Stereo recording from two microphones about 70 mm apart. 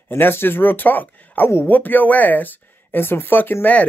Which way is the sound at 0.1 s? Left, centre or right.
Left.